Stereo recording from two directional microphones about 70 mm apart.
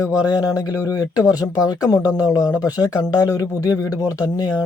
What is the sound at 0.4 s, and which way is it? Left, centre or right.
Speech, left.